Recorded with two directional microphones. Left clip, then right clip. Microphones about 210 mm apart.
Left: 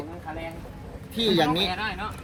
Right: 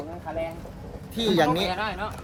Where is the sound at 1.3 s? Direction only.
5° right (ahead or behind).